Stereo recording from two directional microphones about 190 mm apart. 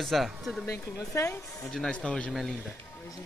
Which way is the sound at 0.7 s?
15° left (ahead or behind).